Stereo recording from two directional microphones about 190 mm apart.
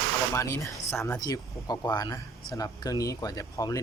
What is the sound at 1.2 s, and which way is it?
Speech, 20° left (ahead or behind).